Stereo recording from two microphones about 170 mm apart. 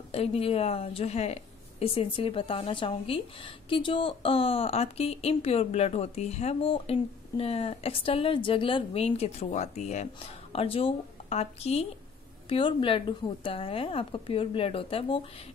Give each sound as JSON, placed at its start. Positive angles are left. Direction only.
{"t": 0.1, "sound": "speech", "side_deg": 35}
{"t": 10.5, "sound": "speech", "side_deg": 35}